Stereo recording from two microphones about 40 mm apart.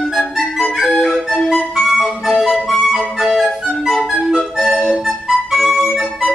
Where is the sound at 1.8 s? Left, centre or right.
Centre.